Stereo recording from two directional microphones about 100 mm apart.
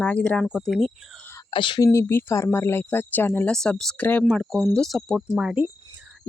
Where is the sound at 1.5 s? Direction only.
50° left (ahead or behind).